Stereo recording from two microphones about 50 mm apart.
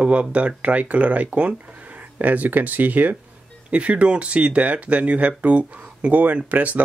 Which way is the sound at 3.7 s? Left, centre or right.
Right.